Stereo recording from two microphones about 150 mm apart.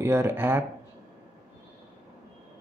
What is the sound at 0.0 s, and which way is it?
Speech, 15° right (ahead or behind).